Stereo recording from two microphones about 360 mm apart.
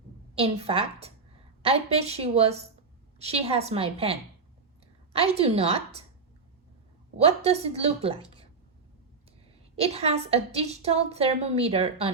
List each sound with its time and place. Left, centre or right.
0.3 s a woman's voice: centre
7.2 s a woman's voice: centre
9.7 s a woman's voice: centre